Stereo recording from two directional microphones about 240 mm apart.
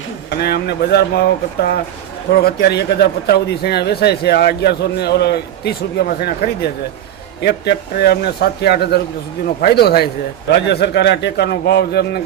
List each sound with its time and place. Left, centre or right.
0.3 s a man's voice: left
2.3 s a man's voice: left